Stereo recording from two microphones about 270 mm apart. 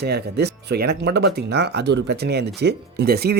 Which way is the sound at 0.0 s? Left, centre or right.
Right.